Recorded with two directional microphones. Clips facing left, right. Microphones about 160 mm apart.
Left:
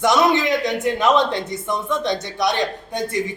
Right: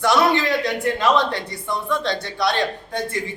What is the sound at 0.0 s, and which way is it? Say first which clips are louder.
A man's voice: left 1 dB; 20° left (ahead or behind).